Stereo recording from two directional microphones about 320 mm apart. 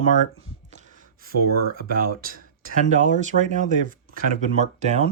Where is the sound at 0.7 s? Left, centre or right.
Right.